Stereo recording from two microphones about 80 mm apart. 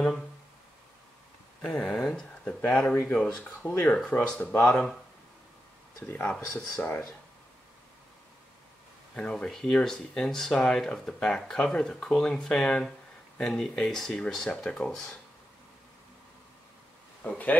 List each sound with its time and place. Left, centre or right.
1.6 s a sound: centre
2.7 s speech: centre
3.6 s speech: left
6.0 s speech: left
6.3 s speech: centre
6.8 s speech: left
9.1 s speech: centre
17.2 s speech: left